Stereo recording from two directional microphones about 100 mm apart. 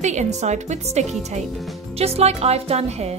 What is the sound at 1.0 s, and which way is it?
Speech, 90° right.